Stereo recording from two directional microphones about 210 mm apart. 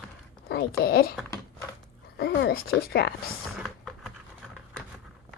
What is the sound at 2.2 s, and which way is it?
Speech, 50° left (ahead or behind).